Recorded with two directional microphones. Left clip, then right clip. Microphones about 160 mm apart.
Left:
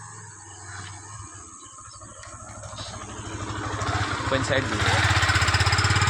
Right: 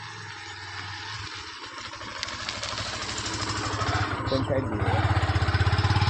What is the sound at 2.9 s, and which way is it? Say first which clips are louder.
Vehicle: right 6 dB; 20° left (ahead or behind).